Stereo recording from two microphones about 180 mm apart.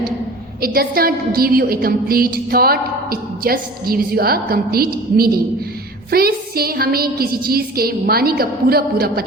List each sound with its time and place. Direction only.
0.6 s a woman's voice: 55° right (ahead or behind)